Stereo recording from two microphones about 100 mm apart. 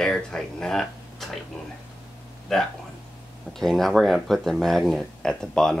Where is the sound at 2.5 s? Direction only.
Centre (ahead or behind).